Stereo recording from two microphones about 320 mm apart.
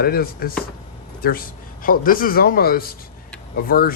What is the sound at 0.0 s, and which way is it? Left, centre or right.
A man's voice, left.